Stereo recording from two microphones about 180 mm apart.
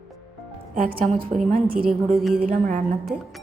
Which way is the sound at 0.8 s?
50° right (ahead or behind).